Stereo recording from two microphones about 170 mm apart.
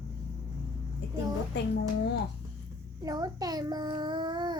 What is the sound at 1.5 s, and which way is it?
Speech, 90° left.